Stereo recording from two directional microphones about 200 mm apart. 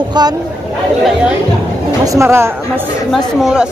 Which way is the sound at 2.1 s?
15° right (ahead or behind).